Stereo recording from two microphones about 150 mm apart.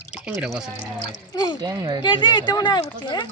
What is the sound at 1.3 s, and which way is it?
Speech, 25° left (ahead or behind).